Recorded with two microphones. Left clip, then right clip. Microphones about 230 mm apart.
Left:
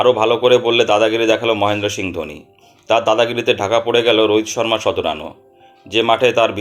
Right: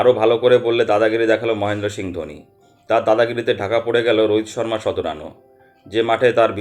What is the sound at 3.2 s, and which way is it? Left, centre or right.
Speech, left.